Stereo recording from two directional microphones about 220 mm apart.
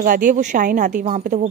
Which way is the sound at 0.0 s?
35° right (ahead or behind).